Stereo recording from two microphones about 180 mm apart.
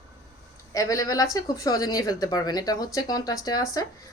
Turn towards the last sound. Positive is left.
turn(degrees=20)  # may be behind; listen again after turning